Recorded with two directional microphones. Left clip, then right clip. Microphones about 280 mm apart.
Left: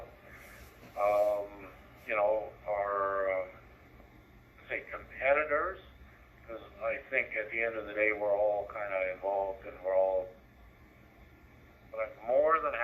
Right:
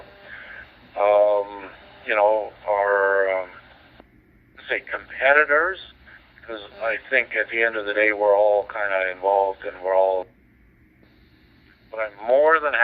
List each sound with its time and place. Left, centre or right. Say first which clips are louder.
0.9 s a sound: right 11 dB; centre
4.7 s speech: right 12 dB; centre
11.9 s speech: right 10 dB; centre